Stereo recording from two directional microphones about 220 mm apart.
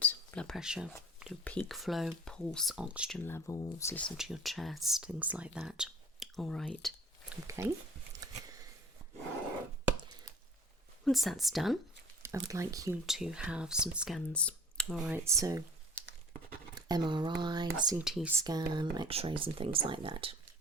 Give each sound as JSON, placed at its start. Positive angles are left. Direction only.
{"t": 0.0, "sound": "speech", "side_deg": 5}
{"t": 3.2, "sound": "speech", "side_deg": 10}
{"t": 7.4, "sound": "speech", "side_deg": -10}
{"t": 11.0, "sound": "speech", "side_deg": 0}
{"t": 12.2, "sound": "speech", "side_deg": -15}
{"t": 13.1, "sound": "speech", "side_deg": 0}
{"t": 15.2, "sound": "speech", "side_deg": -15}
{"t": 16.7, "sound": "speech", "side_deg": -20}
{"t": 18.0, "sound": "speech", "side_deg": -5}